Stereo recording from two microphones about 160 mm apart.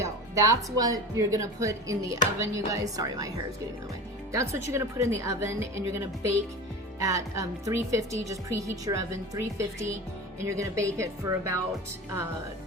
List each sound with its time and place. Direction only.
0.0 s speech: 20° right (ahead or behind)
7.0 s speech: 20° right (ahead or behind)